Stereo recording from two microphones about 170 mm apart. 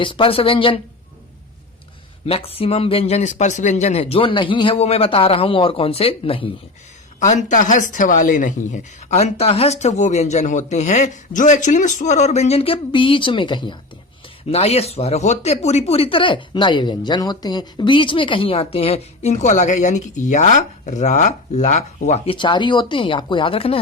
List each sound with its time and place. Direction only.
0.0 s speech: 30° left (ahead or behind)
2.2 s speech: 35° left (ahead or behind)
7.2 s speech: 50° left (ahead or behind)
22.4 s speech: 30° left (ahead or behind)